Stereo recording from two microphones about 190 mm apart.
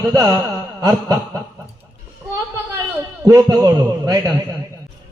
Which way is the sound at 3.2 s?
20° right (ahead or behind).